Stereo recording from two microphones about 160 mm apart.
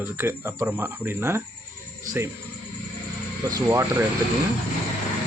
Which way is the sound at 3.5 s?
20° right (ahead or behind).